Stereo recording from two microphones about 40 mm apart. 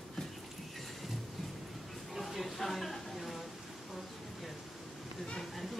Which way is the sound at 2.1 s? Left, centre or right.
Centre.